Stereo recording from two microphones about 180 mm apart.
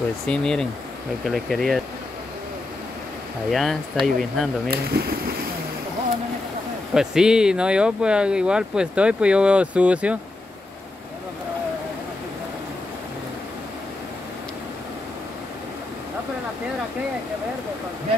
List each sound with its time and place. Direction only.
0.3 s speech: 5° left (ahead or behind)
3.4 s speech: centre (ahead or behind)
4.6 s speech: 60° right (ahead or behind)
6.9 s speech: 5° right (ahead or behind)